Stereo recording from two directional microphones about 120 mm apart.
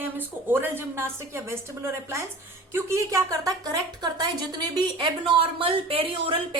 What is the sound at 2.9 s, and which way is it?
A woman's voice, 25° right (ahead or behind).